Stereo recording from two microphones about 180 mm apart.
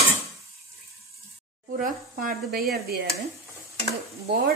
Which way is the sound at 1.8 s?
50° right (ahead or behind).